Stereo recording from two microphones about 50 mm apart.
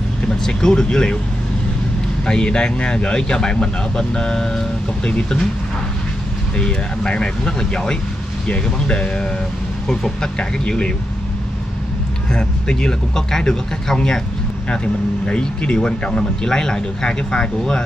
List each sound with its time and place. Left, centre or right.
0.5 s speech: centre
2.2 s speech: centre
6.6 s speech: centre
12.3 s speech: centre
15.2 s speech: centre